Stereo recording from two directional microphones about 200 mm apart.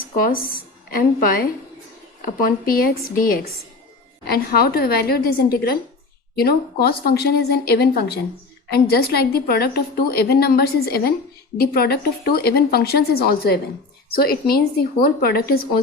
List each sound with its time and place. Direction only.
0.0 s a woman's voice: 45° left (ahead or behind)